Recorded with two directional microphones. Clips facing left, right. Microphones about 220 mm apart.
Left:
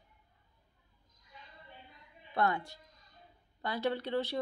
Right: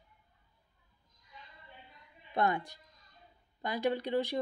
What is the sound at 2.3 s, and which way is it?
A woman's voice, 15° right (ahead or behind).